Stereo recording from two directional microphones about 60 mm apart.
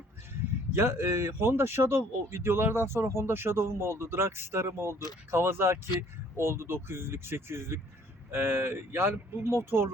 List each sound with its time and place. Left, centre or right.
0.7 s speech: right